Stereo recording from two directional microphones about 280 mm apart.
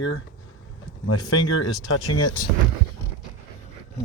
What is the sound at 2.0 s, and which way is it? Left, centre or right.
Speech, centre.